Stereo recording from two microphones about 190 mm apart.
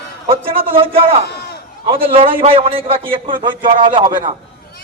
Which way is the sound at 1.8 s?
30° right (ahead or behind).